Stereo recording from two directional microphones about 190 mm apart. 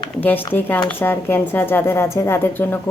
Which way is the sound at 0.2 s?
10° left (ahead or behind).